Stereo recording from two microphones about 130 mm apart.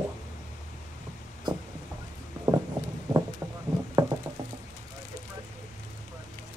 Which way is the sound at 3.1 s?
35° right (ahead or behind).